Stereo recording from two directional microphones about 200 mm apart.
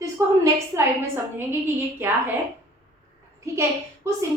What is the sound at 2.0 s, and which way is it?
Speech, 10° right (ahead or behind).